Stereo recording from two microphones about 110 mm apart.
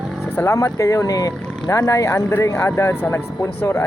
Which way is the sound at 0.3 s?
25° left (ahead or behind).